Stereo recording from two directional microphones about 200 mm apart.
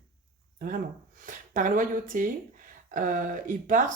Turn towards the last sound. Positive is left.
turn(degrees=-40)  # may be behind; listen again after turning